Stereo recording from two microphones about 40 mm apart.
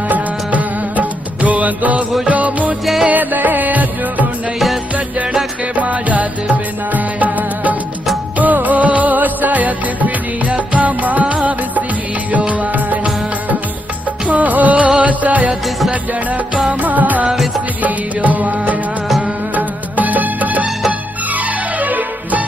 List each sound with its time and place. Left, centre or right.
0.1 s music: right
2.8 s music: centre
3.1 s music: right
5.8 s music: right
14.2 s music: right
16.8 s music: right
21.7 s music: right